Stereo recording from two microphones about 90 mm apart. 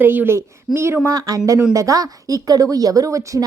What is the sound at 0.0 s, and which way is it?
A woman's voice, 20° right (ahead or behind).